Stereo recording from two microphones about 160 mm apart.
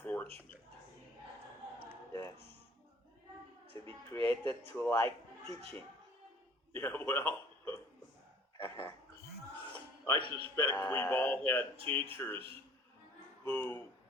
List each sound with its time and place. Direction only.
0.0 s a sound: 10° left (ahead or behind)
4.1 s speech: 15° left (ahead or behind)
6.7 s a man's voice: 10° left (ahead or behind)
10.2 s a man's voice: 35° right (ahead or behind)
10.5 s speech: 15° left (ahead or behind)
11.8 s a man's voice: 35° right (ahead or behind)
12.1 s speech: 10° left (ahead or behind)
13.4 s speech: 15° left (ahead or behind)